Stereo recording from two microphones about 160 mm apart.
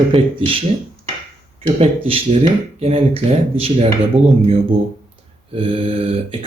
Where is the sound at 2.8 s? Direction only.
40° right (ahead or behind).